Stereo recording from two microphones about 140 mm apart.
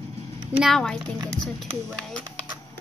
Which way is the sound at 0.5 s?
Centre (ahead or behind).